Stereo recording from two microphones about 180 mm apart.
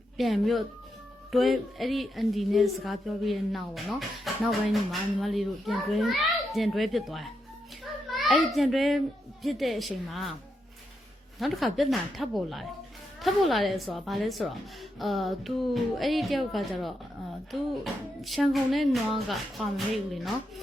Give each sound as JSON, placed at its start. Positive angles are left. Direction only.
{"t": 0.2, "sound": "a woman's voice", "side_deg": 0}
{"t": 11.3, "sound": "a woman's voice", "side_deg": 0}